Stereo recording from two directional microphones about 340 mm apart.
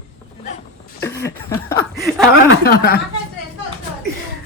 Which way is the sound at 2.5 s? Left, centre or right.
Left.